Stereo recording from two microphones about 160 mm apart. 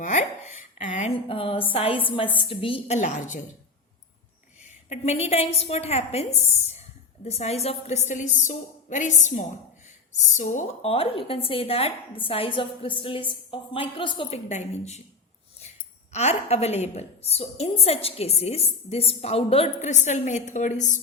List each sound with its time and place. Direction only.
0.0 s speech: 50° left (ahead or behind)
1.1 s a woman's voice: 35° left (ahead or behind); by 3.4 s 50° left (ahead or behind)
4.9 s a woman's voice: 40° left (ahead or behind)
10.8 s a woman's voice: 35° left (ahead or behind)
16.1 s a woman's voice: 40° left (ahead or behind)